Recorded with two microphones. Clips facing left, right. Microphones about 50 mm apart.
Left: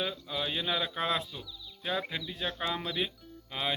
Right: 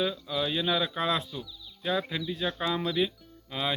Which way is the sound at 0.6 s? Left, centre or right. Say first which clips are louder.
Right 4 dB; centre.